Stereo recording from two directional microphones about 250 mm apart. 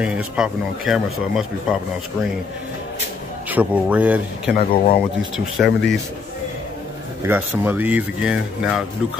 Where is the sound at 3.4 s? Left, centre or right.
Centre.